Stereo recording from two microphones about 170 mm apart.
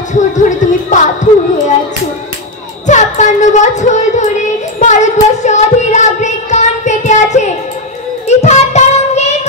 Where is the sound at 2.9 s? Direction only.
45° left (ahead or behind).